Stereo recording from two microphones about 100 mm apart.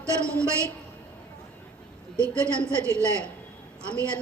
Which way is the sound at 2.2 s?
10° left (ahead or behind).